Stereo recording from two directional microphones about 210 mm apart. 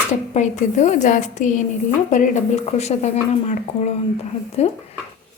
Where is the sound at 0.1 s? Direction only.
35° left (ahead or behind).